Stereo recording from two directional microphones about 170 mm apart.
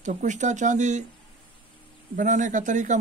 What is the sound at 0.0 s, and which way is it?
Speech, 45° right (ahead or behind).